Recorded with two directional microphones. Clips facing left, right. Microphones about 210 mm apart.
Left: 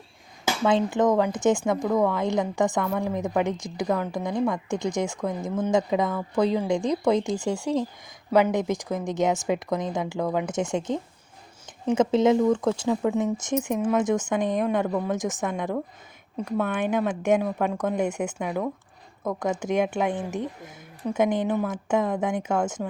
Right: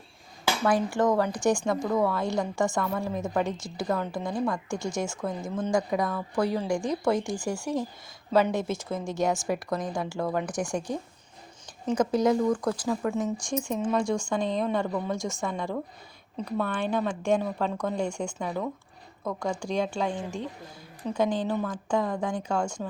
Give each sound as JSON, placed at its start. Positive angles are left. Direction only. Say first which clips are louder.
{"t": 0.4, "sound": "speech", "louder": "left 3 dB", "side_deg": 20}